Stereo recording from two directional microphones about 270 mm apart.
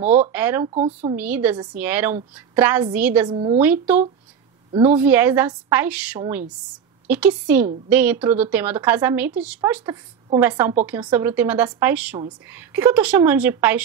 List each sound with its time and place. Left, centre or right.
0.3 s a woman's voice: centre
0.7 s speech: right
1.1 s a woman's voice: centre
3.3 s a woman's voice: centre
3.5 s a woman's voice: centre